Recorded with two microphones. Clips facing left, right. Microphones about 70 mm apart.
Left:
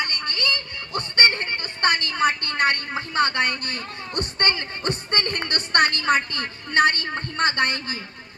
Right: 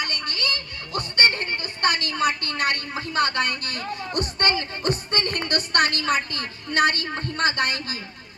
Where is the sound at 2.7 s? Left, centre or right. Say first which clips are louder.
Left 1 dB; left.